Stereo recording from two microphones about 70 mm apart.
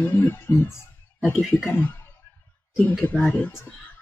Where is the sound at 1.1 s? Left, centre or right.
Left.